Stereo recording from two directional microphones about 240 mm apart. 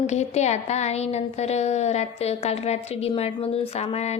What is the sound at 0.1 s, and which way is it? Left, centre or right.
A woman's voice, left.